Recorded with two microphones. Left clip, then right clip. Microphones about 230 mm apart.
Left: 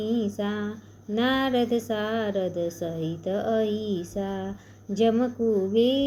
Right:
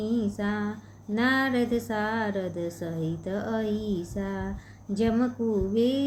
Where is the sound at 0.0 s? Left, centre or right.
Centre.